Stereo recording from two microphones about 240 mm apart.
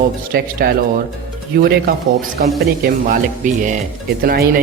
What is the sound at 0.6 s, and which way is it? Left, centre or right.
Speech, right.